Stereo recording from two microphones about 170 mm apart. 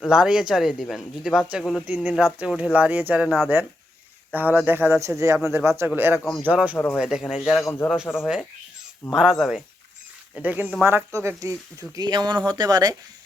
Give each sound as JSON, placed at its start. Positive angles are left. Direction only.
{"t": 0.1, "sound": "speech", "side_deg": -5}
{"t": 3.2, "sound": "speech", "side_deg": 0}
{"t": 4.3, "sound": "speech", "side_deg": -10}
{"t": 6.1, "sound": "speech", "side_deg": 0}
{"t": 6.4, "sound": "speech", "side_deg": -10}
{"t": 6.7, "sound": "a man's voice", "side_deg": 10}
{"t": 7.0, "sound": "speech", "side_deg": -5}
{"t": 7.6, "sound": "a man's voice", "side_deg": 15}
{"t": 8.2, "sound": "speech", "side_deg": -5}